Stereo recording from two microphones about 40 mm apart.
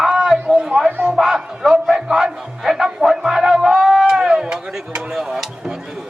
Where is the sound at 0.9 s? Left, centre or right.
Right.